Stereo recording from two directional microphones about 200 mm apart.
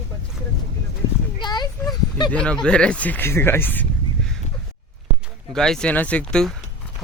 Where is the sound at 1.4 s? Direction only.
20° left (ahead or behind).